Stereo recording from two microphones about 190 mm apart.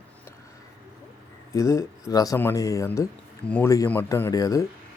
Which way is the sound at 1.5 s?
15° left (ahead or behind).